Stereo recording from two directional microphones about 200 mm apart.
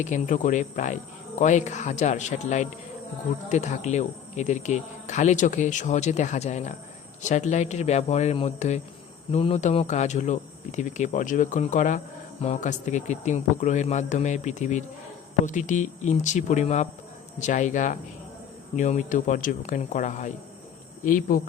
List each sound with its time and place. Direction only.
0.0 s speech: 40° left (ahead or behind)